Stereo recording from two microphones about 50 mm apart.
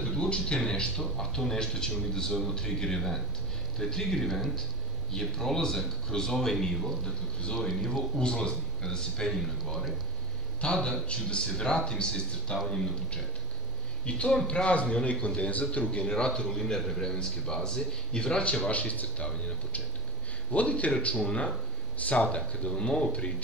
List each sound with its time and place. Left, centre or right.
0.0 s a sound: centre
0.6 s speech: centre
7.1 s speech: centre
7.6 s speech: centre
8.2 s speech: centre
10.6 s speech: centre
16.1 s speech: centre